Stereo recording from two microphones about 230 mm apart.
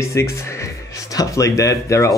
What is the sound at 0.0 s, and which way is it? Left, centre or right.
Speech, centre.